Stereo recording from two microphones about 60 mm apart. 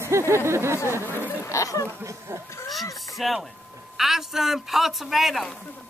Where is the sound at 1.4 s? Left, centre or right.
Left.